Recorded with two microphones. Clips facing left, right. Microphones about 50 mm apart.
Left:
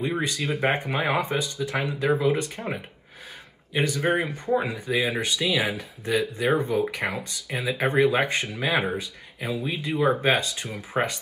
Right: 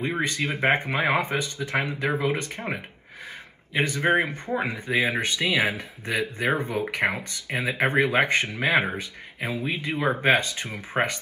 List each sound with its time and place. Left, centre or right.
0.2 s speech: right